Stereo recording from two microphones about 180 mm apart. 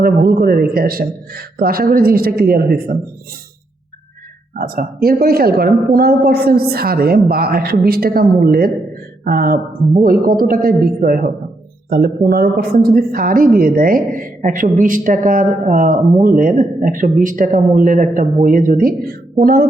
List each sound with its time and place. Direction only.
0.0 s a woman's voice: 60° right (ahead or behind)
4.5 s a woman's voice: 50° right (ahead or behind)